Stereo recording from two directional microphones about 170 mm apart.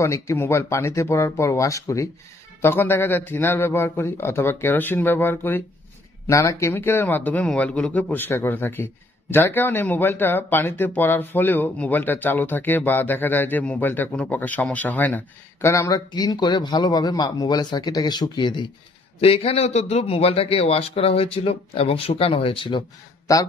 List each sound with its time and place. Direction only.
0.0 s a man's voice: 15° left (ahead or behind)